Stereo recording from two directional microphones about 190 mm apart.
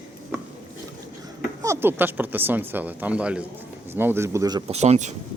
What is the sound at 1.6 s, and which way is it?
Speech, 15° right (ahead or behind).